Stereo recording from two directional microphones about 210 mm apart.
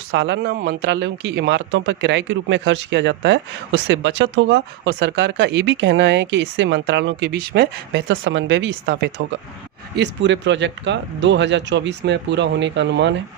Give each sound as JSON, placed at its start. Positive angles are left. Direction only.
{"t": 0.1, "sound": "speech", "side_deg": -60}